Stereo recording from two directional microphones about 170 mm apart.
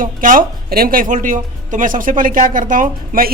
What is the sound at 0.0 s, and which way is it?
Speech, 55° right (ahead or behind).